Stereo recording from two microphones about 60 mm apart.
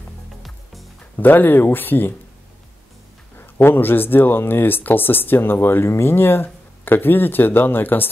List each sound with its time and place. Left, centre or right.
1.1 s speech: left
3.3 s speech: left